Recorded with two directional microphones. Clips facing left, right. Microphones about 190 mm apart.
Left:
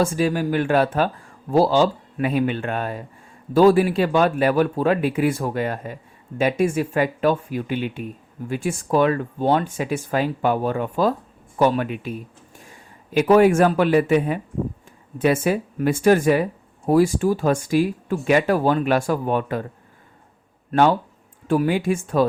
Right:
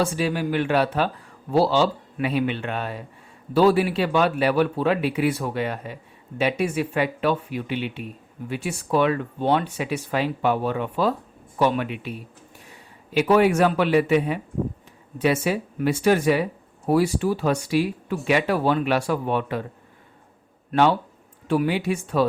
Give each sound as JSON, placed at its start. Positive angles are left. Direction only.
{"t": 0.2, "sound": "speech", "side_deg": 45}
{"t": 13.1, "sound": "speech", "side_deg": 45}
{"t": 20.7, "sound": "speech", "side_deg": 45}